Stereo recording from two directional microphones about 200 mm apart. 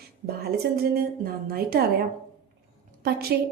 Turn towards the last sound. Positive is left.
turn(degrees=-50)  # may be behind; listen again after turning